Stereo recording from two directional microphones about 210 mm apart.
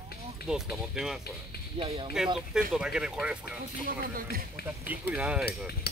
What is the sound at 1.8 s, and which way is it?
Speech, 25° right (ahead or behind).